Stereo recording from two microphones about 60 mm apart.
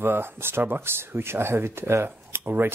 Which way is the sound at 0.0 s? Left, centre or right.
Right.